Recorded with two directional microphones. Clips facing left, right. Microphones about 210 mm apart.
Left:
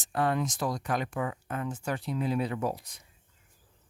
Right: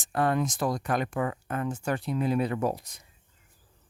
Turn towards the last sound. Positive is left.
turn(degrees=-45)  # may be behind; listen again after turning